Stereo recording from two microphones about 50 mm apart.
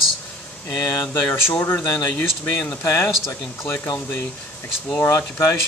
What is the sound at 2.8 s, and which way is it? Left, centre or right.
Speech, left.